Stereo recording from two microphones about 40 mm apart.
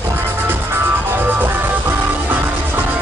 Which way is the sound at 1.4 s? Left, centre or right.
Right.